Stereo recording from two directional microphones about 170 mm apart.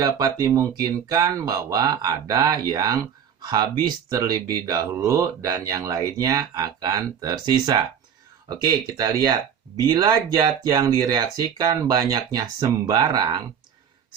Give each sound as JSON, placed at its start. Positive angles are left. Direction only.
{"t": 0.0, "sound": "speech", "side_deg": -20}